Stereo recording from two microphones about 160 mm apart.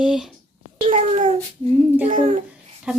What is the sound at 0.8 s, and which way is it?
A child's voice, 40° right (ahead or behind).